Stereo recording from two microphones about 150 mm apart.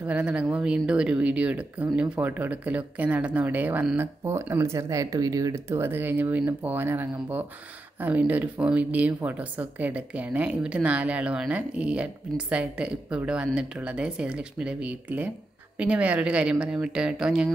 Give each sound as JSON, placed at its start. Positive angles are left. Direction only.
{"t": 0.0, "sound": "a woman's voice", "side_deg": -10}